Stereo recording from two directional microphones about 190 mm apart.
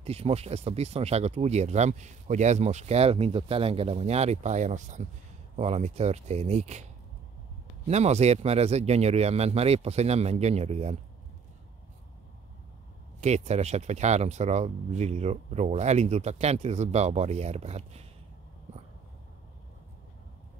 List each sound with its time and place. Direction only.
0.0 s speech: 30° right (ahead or behind)
13.2 s speech: 35° right (ahead or behind)